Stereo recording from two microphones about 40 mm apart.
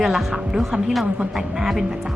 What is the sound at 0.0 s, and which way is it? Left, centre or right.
A woman's voice, centre.